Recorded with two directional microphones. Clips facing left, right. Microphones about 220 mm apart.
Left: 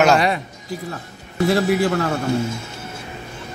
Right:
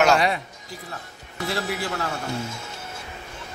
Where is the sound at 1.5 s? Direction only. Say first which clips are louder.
Left 10 dB; 50° left (ahead or behind).